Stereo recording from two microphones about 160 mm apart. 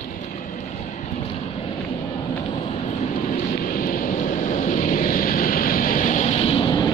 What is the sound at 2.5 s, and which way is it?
Vehicle, 45° left (ahead or behind).